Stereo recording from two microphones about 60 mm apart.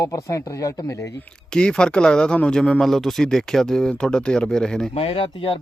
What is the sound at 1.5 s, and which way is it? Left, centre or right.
Speech, centre.